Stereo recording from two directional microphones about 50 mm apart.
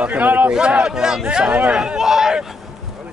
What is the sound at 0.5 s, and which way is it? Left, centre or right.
Speech, centre.